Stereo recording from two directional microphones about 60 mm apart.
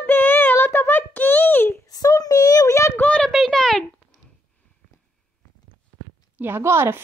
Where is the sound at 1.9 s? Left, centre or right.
Left.